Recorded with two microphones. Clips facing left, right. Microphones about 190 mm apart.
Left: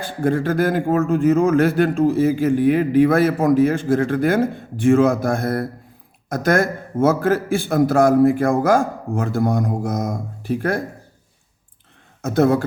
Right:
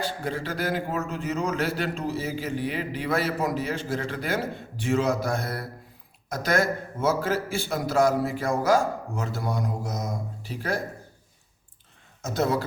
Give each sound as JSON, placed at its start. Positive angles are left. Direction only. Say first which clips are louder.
{"t": 0.0, "sound": "a man's voice", "louder": "left 10 dB", "side_deg": 50}
{"t": 12.2, "sound": "speech", "louder": "left 9 dB", "side_deg": 55}